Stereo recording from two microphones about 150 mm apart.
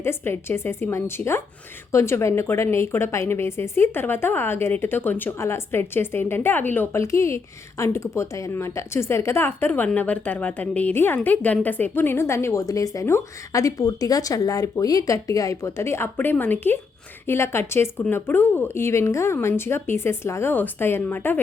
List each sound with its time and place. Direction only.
0.0 s a woman's voice: 15° left (ahead or behind)